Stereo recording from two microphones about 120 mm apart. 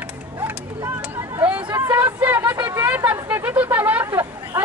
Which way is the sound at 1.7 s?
20° right (ahead or behind).